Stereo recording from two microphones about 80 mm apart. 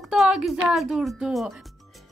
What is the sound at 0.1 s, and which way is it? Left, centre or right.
A woman's voice, centre.